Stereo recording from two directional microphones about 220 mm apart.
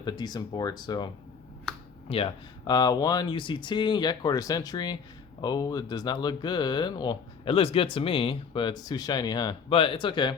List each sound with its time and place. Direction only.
0.0 s speech: 20° left (ahead or behind)